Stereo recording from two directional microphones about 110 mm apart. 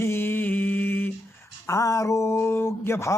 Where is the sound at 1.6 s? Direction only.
30° left (ahead or behind).